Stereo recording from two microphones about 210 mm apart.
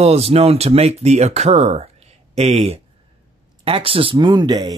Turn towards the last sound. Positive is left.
turn(degrees=-20)  # may be behind; listen again after turning